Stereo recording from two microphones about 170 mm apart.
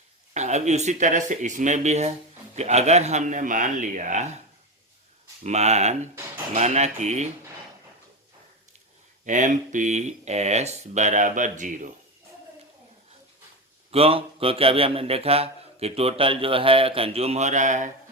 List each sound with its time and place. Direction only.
0.3 s speech: 45° right (ahead or behind)
5.4 s a man's voice: 40° right (ahead or behind)
9.2 s speech: 50° right (ahead or behind)
13.9 s a man's voice: 35° right (ahead or behind)